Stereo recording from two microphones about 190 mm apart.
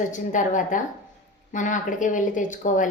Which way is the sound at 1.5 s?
40° left (ahead or behind).